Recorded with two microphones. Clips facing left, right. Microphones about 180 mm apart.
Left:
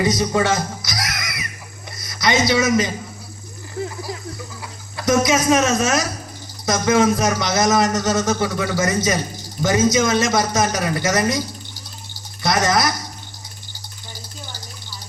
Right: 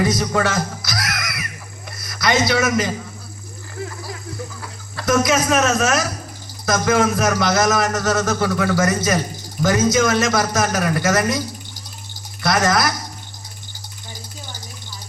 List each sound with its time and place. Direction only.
0.0 s a man's voice: 20° left (ahead or behind)
4.9 s a man's voice: 20° left (ahead or behind)
12.4 s speech: 20° left (ahead or behind)